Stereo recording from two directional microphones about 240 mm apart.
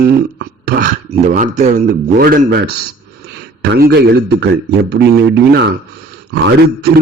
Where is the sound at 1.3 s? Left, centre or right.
Right.